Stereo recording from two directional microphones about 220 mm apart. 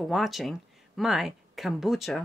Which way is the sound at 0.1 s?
Centre (ahead or behind).